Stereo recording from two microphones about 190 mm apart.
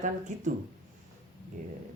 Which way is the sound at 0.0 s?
40° right (ahead or behind).